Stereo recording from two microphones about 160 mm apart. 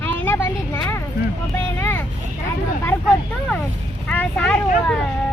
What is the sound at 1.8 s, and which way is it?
Vehicle, 15° left (ahead or behind).